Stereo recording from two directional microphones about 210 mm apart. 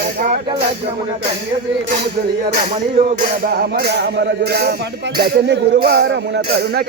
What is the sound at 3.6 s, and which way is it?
Music, 50° right (ahead or behind).